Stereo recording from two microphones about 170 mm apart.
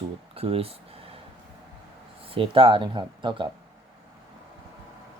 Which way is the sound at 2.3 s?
30° right (ahead or behind).